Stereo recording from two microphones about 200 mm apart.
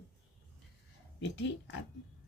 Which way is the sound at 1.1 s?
65° left (ahead or behind).